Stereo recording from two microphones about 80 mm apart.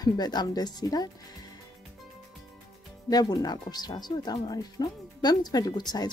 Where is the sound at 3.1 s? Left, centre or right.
Left.